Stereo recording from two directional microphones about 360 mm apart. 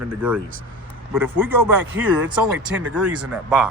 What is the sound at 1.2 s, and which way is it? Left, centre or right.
Speech, right.